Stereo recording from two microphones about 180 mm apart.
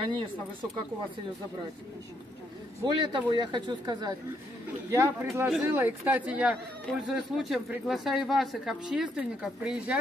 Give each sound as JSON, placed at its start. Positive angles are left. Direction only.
{"t": 0.1, "sound": "speech", "side_deg": -25}
{"t": 2.9, "sound": "speech", "side_deg": -25}
{"t": 4.9, "sound": "speech", "side_deg": -15}